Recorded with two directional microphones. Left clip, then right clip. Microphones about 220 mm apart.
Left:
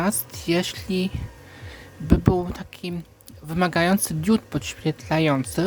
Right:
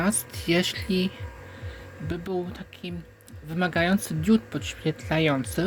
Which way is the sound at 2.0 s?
30° left (ahead or behind).